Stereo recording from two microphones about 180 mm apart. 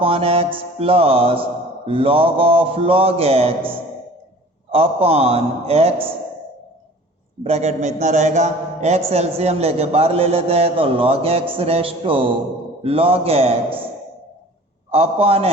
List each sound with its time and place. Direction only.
0.0 s a man's voice: 30° right (ahead or behind)
4.7 s a man's voice: 35° right (ahead or behind)
7.4 s a man's voice: 40° right (ahead or behind)
14.8 s a man's voice: 35° right (ahead or behind)